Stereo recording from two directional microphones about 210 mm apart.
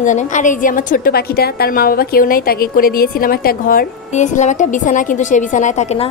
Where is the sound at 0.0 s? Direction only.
35° left (ahead or behind).